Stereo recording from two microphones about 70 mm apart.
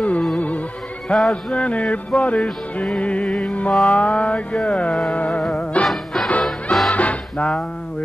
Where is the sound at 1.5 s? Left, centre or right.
Centre.